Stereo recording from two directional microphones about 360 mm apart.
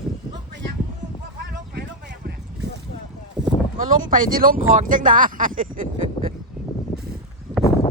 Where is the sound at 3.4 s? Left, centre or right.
Centre.